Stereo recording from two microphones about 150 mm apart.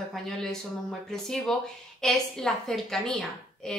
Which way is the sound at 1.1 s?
5° left (ahead or behind).